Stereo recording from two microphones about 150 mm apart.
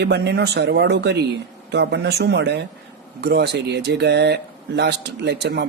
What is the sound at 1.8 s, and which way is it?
Speech, 90° right.